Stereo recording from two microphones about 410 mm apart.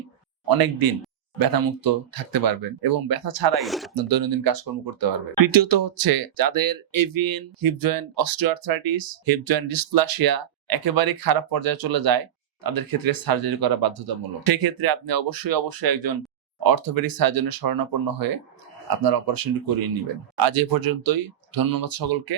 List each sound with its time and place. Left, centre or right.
0.4 s speech: right
3.5 s speech: centre
3.9 s speech: right